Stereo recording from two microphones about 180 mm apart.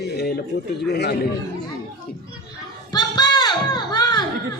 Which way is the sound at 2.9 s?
25° left (ahead or behind).